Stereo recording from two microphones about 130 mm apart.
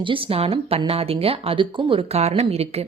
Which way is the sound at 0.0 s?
45° right (ahead or behind).